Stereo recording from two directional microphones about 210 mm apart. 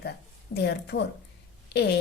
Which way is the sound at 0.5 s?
50° left (ahead or behind).